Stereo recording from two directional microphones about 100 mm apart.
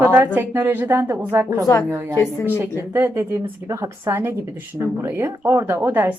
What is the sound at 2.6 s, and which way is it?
A woman's voice, 25° right (ahead or behind).